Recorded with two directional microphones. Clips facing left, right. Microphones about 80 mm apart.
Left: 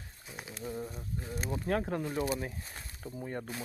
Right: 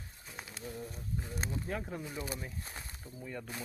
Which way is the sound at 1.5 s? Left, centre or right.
Left.